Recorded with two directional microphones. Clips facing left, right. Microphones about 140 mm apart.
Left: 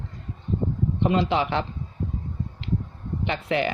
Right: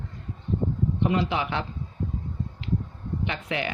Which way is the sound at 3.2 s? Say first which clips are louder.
Left 6 dB; 30° left (ahead or behind).